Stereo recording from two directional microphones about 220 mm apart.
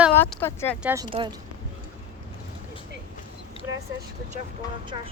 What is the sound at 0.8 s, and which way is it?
Speech, 10° right (ahead or behind).